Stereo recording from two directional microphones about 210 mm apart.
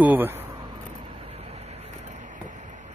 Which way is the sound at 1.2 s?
30° right (ahead or behind).